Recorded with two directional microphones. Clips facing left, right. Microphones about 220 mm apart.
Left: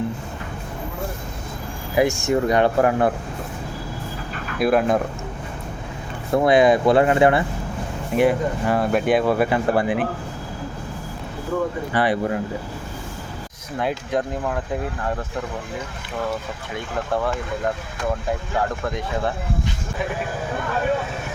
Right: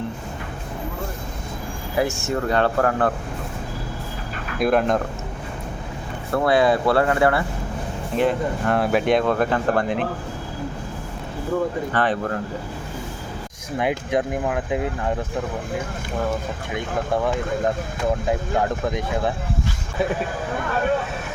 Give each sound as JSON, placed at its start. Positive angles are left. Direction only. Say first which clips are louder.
{"t": 2.0, "sound": "speech", "louder": "left 4 dB", "side_deg": 15}
{"t": 4.6, "sound": "speech", "louder": "left 1 dB", "side_deg": 5}
{"t": 6.3, "sound": "speech", "louder": "left 3 dB", "side_deg": 15}
{"t": 11.9, "sound": "speech", "louder": "left 3 dB", "side_deg": 10}
{"t": 13.7, "sound": "speech", "louder": "right 1 dB", "side_deg": -10}